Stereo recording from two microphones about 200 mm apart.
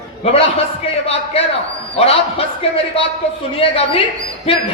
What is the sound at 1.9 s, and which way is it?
A man's voice, 30° left (ahead or behind).